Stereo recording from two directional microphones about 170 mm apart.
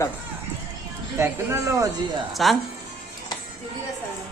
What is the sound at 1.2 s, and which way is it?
Speech, 15° right (ahead or behind).